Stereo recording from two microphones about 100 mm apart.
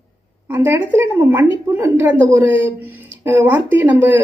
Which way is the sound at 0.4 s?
20° right (ahead or behind).